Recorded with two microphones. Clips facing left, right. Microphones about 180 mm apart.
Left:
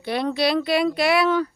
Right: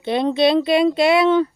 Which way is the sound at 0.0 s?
20° right (ahead or behind).